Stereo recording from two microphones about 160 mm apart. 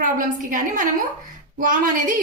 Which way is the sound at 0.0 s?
55° right (ahead or behind).